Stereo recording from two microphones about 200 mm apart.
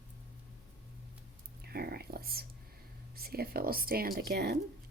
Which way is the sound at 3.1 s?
50° right (ahead or behind).